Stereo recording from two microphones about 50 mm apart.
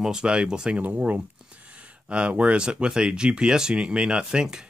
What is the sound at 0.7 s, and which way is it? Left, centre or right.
Speech, right.